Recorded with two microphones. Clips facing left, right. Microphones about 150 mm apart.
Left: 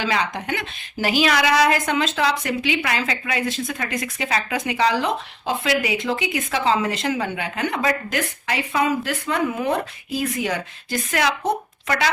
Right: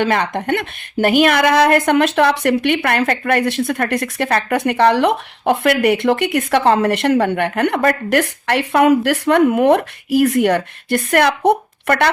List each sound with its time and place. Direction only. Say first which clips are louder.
0.0 s a woman's voice: right 6 dB; 55° right (ahead or behind)